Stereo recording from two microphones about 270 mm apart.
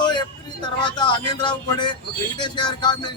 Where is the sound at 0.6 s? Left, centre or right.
Centre.